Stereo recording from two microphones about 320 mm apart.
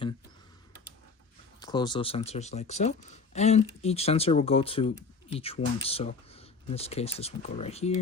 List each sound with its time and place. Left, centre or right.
1.5 s speech: centre